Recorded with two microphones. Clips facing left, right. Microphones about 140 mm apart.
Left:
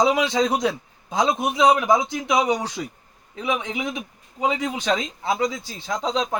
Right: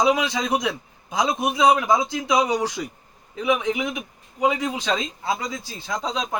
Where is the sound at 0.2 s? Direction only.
30° left (ahead or behind).